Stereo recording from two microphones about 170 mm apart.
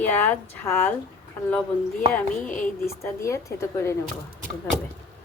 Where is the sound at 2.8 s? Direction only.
15° left (ahead or behind).